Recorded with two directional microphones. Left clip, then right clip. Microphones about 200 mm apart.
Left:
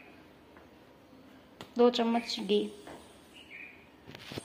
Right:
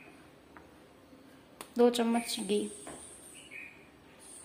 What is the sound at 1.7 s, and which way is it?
Speech, 15° right (ahead or behind).